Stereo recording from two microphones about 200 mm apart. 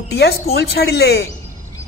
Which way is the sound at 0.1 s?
55° left (ahead or behind).